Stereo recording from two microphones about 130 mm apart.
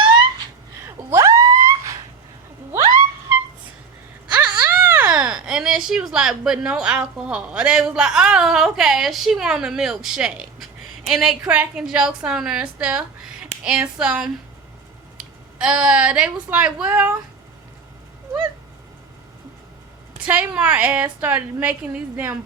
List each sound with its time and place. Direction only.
1.1 s a sound: 25° right (ahead or behind)
4.3 s a woman's voice: 15° right (ahead or behind)
20.1 s a woman's voice: 10° right (ahead or behind)